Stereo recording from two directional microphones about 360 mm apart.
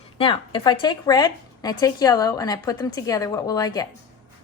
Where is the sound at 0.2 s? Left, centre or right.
Centre.